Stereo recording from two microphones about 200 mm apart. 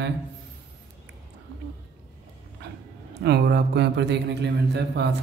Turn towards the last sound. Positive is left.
turn(degrees=-55)  # may be behind; listen again after turning